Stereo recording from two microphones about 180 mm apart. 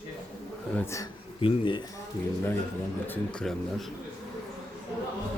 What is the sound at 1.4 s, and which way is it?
Speech, 30° left (ahead or behind).